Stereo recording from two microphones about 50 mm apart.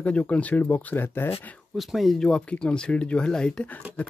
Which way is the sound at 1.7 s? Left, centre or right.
Centre.